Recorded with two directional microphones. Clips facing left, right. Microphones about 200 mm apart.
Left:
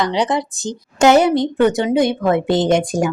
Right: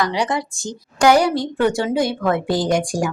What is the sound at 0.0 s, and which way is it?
A woman's voice, 20° left (ahead or behind).